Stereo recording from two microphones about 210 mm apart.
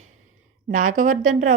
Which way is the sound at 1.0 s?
35° right (ahead or behind).